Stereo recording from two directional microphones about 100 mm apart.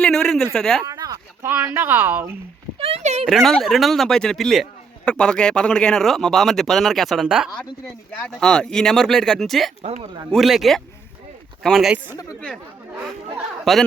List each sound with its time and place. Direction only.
0.0 s speech: 5° left (ahead or behind)
0.9 s a sound: 40° right (ahead or behind)
1.4 s speech: 20° right (ahead or behind)
2.7 s a sound: 75° right (ahead or behind)
3.2 s speech: centre (ahead or behind)
8.2 s a man's voice: 5° left (ahead or behind)
13.7 s speech: centre (ahead or behind)